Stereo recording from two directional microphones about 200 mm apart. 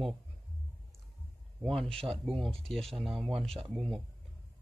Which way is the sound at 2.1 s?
25° right (ahead or behind).